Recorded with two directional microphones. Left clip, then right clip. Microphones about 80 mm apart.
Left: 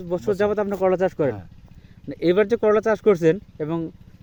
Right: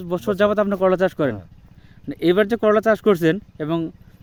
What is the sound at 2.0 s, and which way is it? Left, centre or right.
Speech, right.